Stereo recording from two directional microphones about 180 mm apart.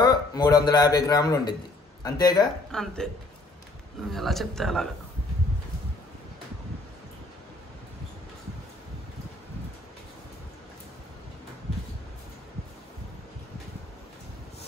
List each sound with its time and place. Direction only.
0.0 s speech: 20° left (ahead or behind)
2.7 s a man's voice: 5° left (ahead or behind)
4.1 s a man's voice: centre (ahead or behind)